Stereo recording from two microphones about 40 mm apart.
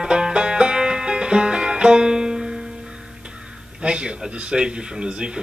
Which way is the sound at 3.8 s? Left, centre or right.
Right.